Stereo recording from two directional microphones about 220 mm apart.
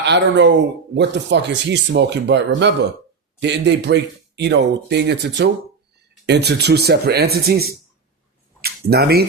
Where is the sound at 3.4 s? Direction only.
50° right (ahead or behind).